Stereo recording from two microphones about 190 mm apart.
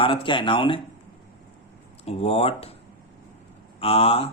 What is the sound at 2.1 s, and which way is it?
Speech, 35° left (ahead or behind).